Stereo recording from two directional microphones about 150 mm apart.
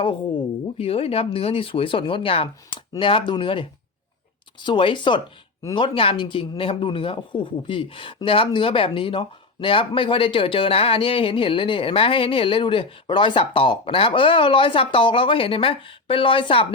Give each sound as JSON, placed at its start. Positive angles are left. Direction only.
{"t": 0.8, "sound": "speech", "side_deg": 40}